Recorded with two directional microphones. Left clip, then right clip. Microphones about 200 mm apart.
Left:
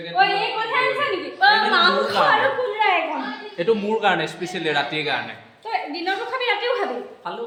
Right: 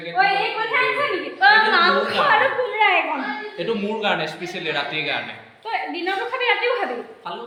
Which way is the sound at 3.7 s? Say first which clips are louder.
Left 4 dB; 55° left (ahead or behind).